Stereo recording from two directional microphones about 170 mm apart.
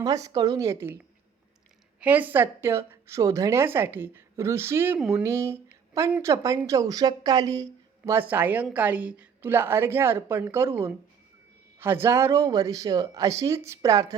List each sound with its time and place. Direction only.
0.0 s speech: 20° right (ahead or behind)
2.0 s speech: 10° right (ahead or behind)